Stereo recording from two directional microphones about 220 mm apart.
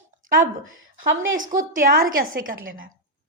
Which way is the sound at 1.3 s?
35° right (ahead or behind).